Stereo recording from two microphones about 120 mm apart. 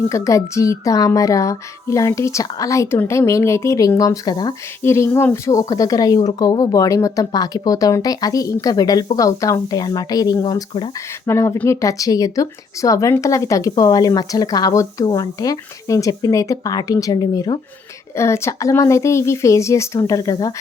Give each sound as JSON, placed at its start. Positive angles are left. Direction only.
{"t": 0.1, "sound": "speech", "side_deg": 25}
{"t": 4.8, "sound": "speech", "side_deg": 20}
{"t": 18.1, "sound": "speech", "side_deg": 25}